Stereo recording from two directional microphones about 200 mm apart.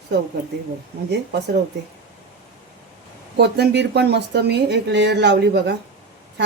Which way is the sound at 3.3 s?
55° right (ahead or behind).